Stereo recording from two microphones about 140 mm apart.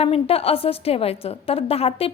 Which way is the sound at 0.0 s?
45° left (ahead or behind).